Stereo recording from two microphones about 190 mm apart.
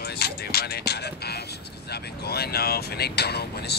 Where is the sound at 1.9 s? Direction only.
55° left (ahead or behind).